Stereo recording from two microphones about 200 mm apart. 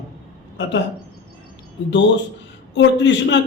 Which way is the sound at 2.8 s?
65° left (ahead or behind).